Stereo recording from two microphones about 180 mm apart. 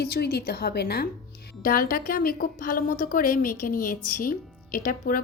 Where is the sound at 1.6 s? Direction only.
50° left (ahead or behind).